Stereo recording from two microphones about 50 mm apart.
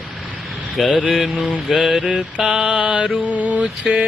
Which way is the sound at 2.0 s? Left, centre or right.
Right.